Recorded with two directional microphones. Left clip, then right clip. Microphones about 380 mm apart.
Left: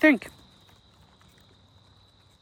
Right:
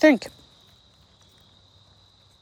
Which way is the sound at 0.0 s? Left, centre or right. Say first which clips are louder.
Right 3 dB; centre.